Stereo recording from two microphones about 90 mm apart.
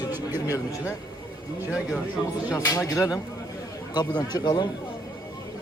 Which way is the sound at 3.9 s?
50° left (ahead or behind).